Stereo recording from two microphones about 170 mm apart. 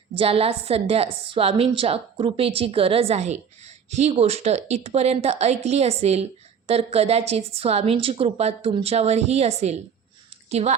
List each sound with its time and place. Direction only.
0.1 s a woman's voice: 35° right (ahead or behind)